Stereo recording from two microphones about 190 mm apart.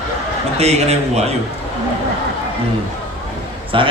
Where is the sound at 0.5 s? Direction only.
35° right (ahead or behind).